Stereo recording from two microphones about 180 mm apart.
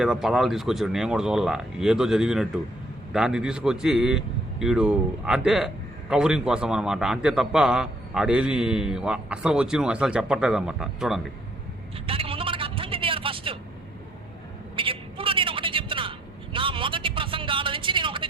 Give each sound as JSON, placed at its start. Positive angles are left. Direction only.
{"t": 0.0, "sound": "a man's voice", "side_deg": -5}
{"t": 12.0, "sound": "vehicle", "side_deg": -30}
{"t": 14.8, "sound": "vehicle", "side_deg": -30}